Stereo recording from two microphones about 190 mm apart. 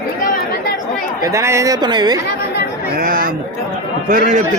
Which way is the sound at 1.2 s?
15° right (ahead or behind).